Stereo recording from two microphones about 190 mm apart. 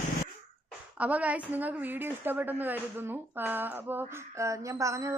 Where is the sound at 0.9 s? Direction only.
5° right (ahead or behind).